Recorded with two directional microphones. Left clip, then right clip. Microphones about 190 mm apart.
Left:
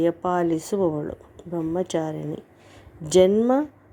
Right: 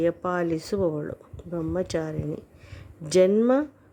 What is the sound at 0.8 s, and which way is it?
Speech, 15° right (ahead or behind).